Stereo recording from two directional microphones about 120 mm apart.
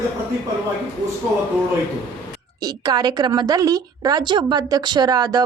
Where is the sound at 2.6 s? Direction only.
35° right (ahead or behind).